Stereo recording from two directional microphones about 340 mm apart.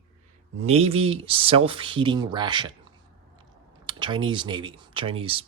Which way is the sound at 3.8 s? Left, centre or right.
Centre.